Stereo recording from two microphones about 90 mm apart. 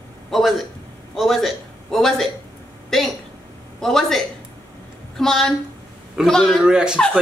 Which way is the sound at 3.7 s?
5° left (ahead or behind).